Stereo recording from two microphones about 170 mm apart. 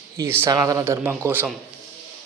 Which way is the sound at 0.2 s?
15° right (ahead or behind).